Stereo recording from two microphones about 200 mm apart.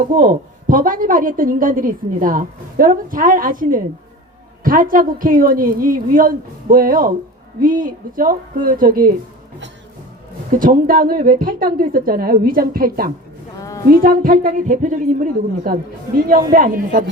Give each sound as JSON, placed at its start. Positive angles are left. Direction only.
{"t": 0.1, "sound": "a woman's voice", "side_deg": -40}
{"t": 10.5, "sound": "a woman's voice", "side_deg": -45}
{"t": 13.6, "sound": "a sound", "side_deg": 15}
{"t": 13.9, "sound": "a woman's voice", "side_deg": -45}